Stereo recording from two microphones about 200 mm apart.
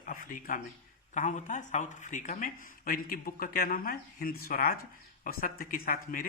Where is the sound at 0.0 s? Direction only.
45° left (ahead or behind).